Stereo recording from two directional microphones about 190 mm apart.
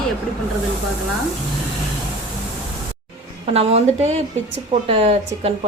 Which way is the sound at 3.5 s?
35° right (ahead or behind).